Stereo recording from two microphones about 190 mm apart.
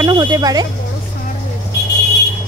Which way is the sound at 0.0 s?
20° right (ahead or behind).